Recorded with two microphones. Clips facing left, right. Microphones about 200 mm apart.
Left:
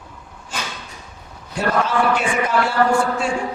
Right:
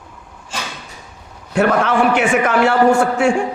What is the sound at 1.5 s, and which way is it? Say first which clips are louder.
A man's voice: right 5 dB; 70° right (ahead or behind).